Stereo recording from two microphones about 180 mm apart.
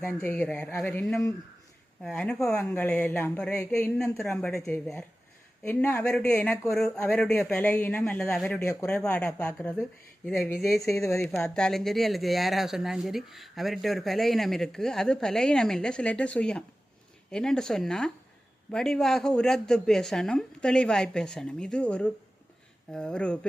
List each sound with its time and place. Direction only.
0.0 s a man's voice: 10° left (ahead or behind)
11.2 s speech: 5° left (ahead or behind)